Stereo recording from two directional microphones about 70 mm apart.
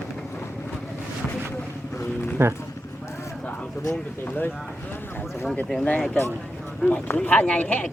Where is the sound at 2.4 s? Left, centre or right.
Right.